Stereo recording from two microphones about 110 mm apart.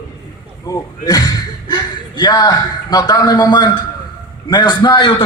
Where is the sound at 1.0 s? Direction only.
30° left (ahead or behind).